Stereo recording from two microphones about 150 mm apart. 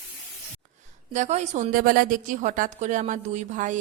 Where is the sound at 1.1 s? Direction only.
50° right (ahead or behind).